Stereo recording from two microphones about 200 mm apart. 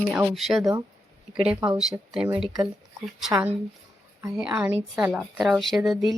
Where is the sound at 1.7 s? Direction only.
Centre (ahead or behind).